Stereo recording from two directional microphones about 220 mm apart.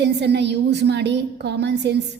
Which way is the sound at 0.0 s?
50° right (ahead or behind).